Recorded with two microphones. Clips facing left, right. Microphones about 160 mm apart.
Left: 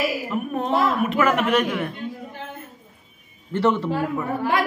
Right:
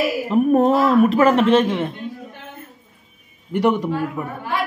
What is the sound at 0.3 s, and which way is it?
A man's voice, 40° right (ahead or behind).